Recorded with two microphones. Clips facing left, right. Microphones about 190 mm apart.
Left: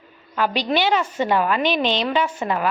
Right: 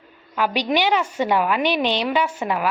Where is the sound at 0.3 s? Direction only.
10° right (ahead or behind).